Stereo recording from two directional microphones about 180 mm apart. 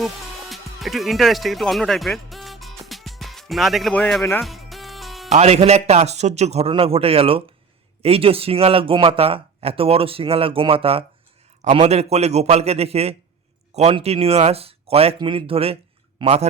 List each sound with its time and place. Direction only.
0.5 s speech: centre (ahead or behind)
2.8 s music: centre (ahead or behind)
5.3 s speech: 35° right (ahead or behind)